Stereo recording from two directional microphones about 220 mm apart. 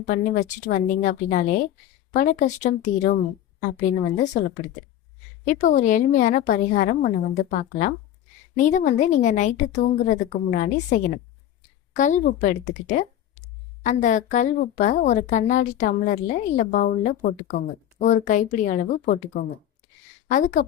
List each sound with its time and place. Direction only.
0.1 s a woman's voice: 35° left (ahead or behind)
4.4 s a woman's voice: 40° left (ahead or behind)